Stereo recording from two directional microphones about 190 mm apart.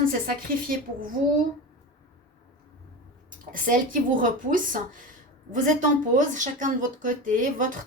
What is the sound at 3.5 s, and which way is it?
A woman's voice, 45° right (ahead or behind).